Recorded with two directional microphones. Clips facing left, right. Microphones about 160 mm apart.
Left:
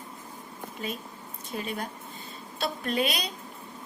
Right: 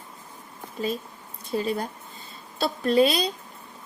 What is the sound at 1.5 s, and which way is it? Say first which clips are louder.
A woman's voice: right 7 dB; 35° right (ahead or behind).